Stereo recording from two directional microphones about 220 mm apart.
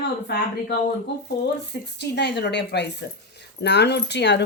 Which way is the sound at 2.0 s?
50° left (ahead or behind).